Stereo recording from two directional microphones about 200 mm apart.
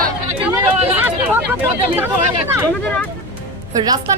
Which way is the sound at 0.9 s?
10° right (ahead or behind).